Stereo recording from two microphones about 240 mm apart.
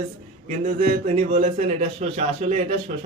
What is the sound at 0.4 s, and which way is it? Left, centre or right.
A man's voice, right.